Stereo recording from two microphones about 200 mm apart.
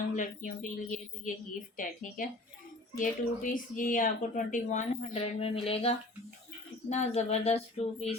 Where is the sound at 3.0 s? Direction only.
40° left (ahead or behind).